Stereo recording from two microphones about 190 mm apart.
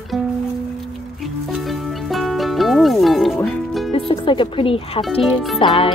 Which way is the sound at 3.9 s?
25° left (ahead or behind).